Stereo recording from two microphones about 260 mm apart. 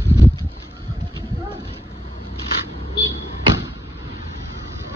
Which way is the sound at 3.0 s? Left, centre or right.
Right.